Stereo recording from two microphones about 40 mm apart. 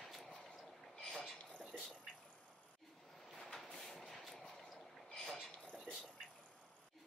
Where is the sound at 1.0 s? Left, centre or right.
Centre.